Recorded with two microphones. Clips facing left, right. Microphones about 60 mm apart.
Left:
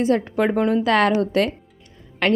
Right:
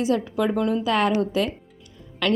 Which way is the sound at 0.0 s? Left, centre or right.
Left.